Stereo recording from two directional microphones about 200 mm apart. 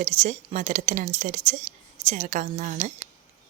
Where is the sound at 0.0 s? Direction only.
40° right (ahead or behind).